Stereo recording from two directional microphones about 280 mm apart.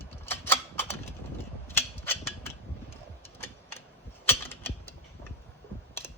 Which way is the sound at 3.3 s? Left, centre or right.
Centre.